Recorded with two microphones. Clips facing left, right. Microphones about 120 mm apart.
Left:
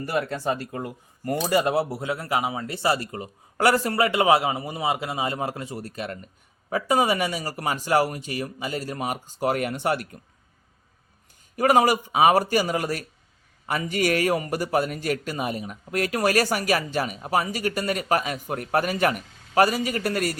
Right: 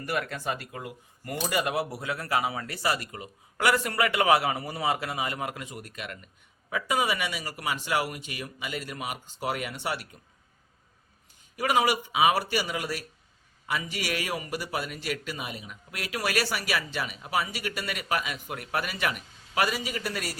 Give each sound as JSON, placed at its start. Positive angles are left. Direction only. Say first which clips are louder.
{"t": 0.0, "sound": "speech", "louder": "left 5 dB", "side_deg": 30}
{"t": 11.5, "sound": "a man's voice", "louder": "left 6 dB", "side_deg": 45}